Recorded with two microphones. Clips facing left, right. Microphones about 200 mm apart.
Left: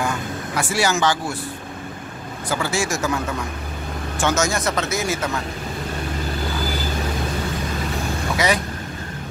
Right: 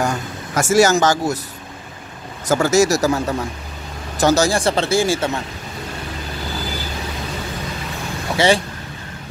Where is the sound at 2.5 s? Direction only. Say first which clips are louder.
Right 9 dB; 45° right (ahead or behind).